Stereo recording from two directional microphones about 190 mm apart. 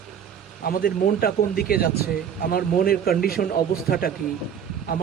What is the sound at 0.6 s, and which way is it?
A man's voice, 50° left (ahead or behind).